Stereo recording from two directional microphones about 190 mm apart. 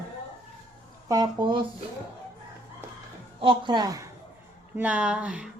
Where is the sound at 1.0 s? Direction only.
20° right (ahead or behind).